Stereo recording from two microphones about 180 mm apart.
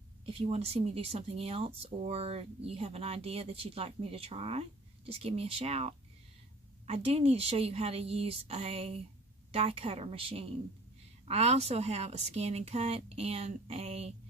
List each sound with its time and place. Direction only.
0.2 s speech: 30° right (ahead or behind)